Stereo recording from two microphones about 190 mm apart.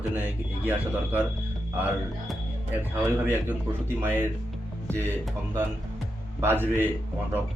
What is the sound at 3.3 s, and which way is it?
Speech, 10° right (ahead or behind).